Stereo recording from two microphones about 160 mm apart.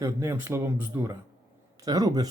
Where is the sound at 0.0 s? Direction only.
15° right (ahead or behind).